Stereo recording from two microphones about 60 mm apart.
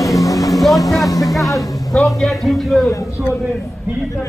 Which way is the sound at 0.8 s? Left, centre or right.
Left.